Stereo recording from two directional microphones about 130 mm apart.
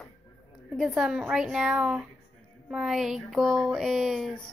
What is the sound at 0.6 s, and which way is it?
Speech, 5° right (ahead or behind).